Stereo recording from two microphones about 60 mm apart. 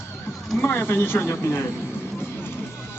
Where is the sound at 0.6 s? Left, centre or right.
Left.